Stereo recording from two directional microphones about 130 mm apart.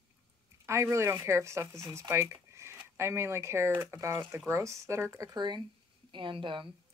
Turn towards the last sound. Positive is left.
turn(degrees=-40)  # may be behind; listen again after turning